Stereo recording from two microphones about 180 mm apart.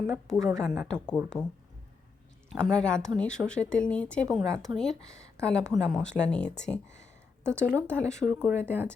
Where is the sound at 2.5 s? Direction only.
5° left (ahead or behind).